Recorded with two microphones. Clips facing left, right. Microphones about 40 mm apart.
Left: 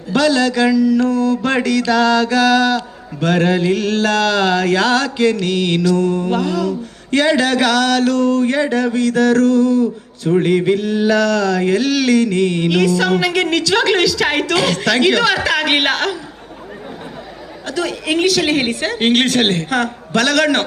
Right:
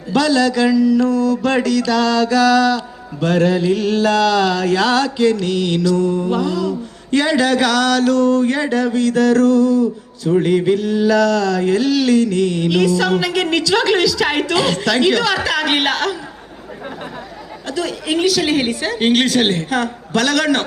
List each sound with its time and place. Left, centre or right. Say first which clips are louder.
0.1 s mantra: even; left
4.4 s mantra: left 1 dB; left
4.6 s mantra: even; left
10.3 s mantra: even; centre
10.7 s mantra: even; left
17.7 s mantra: left 1 dB; left